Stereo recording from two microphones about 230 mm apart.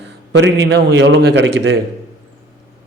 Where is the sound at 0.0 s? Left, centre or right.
Right.